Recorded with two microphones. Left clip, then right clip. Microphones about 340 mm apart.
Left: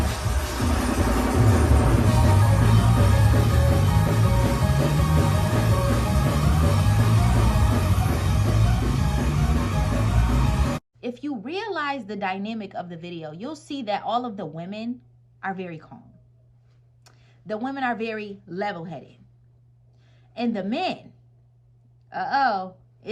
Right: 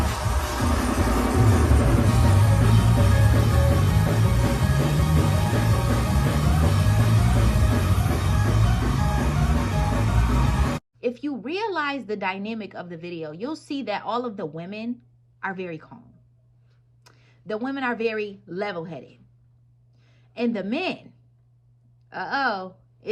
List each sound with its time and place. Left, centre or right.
0.0 s music: centre
11.5 s a woman's voice: left
17.2 s a woman's voice: left
20.3 s a woman's voice: left
22.1 s a woman's voice: left